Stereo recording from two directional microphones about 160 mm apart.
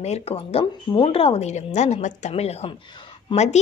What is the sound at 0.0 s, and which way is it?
A woman's voice, 40° left (ahead or behind).